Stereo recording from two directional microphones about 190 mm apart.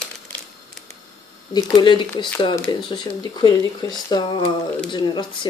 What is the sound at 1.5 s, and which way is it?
Speech, 25° left (ahead or behind).